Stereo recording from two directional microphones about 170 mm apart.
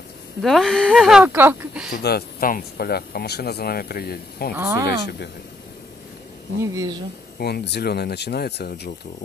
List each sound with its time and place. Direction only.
0.4 s speech: centre (ahead or behind)
1.9 s speech: 70° left (ahead or behind)
4.6 s speech: 15° right (ahead or behind)
6.6 s speech: 20° right (ahead or behind)
7.3 s speech: 70° left (ahead or behind)